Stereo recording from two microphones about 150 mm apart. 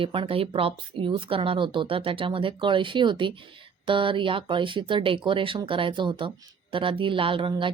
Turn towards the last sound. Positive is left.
turn(degrees=-35)  # may be behind; listen again after turning